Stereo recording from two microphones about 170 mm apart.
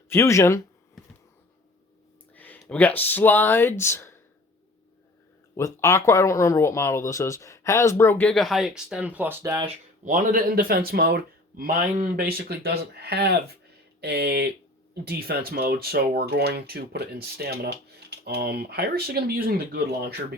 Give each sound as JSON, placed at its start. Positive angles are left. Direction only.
{"t": 0.1, "sound": "speech", "side_deg": 15}
{"t": 2.3, "sound": "speech", "side_deg": 10}
{"t": 5.5, "sound": "speech", "side_deg": 15}
{"t": 10.0, "sound": "speech", "side_deg": -45}